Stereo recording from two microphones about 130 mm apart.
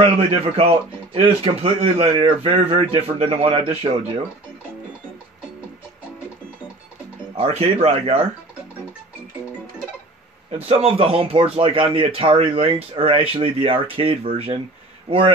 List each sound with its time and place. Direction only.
0.0 s speech: 50° right (ahead or behind)
7.3 s speech: 50° right (ahead or behind)
10.7 s speech: 50° right (ahead or behind)